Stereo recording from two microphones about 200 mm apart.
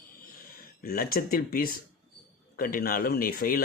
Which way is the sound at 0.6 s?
45° left (ahead or behind).